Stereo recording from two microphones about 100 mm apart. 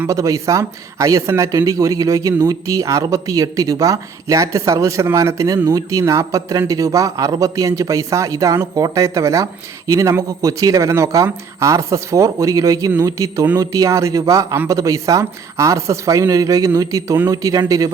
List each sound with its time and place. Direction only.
0.1 s a man's voice: 35° right (ahead or behind)